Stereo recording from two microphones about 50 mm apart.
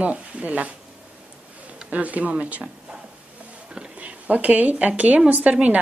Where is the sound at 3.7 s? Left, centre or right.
Right.